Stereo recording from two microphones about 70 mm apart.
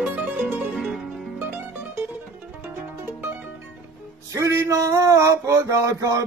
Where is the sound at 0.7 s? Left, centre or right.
Centre.